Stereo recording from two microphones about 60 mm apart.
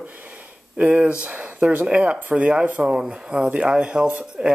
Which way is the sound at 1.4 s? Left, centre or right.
Centre.